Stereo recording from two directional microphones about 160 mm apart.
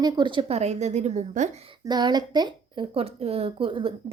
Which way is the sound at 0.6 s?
45° right (ahead or behind).